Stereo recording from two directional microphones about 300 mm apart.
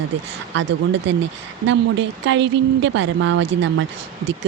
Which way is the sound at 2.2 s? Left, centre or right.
Right.